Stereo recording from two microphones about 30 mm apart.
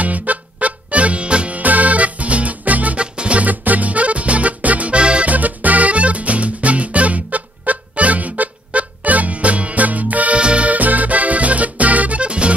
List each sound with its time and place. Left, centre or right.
0.0 s music: right
1.6 s music: right
3.0 s music: right
3.4 s music: right
4.9 s music: right
5.2 s music: right
10.3 s music: right
10.7 s music: right
12.2 s music: right